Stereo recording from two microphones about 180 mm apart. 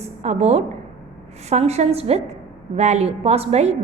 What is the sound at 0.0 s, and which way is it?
A woman's voice, 40° right (ahead or behind).